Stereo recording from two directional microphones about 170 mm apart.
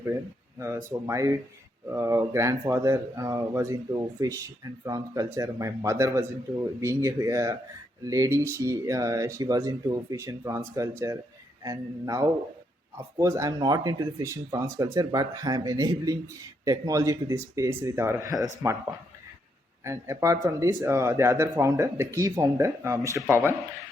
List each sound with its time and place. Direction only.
0.9 s speech: 15° right (ahead or behind)
19.8 s speech: 15° right (ahead or behind)